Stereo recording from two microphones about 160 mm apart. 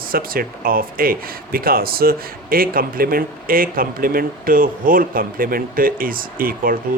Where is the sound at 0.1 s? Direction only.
65° right (ahead or behind).